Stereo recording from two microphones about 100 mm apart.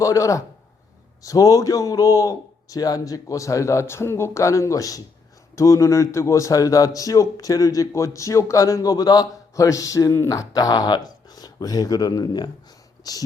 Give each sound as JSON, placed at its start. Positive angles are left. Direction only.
{"t": 0.0, "sound": "a man's voice", "side_deg": 35}